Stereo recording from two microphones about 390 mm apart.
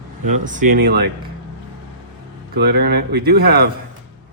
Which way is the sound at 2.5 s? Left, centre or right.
Right.